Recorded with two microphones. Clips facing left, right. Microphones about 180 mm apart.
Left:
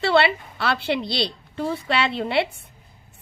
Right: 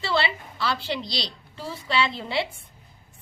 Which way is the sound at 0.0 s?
65° left (ahead or behind).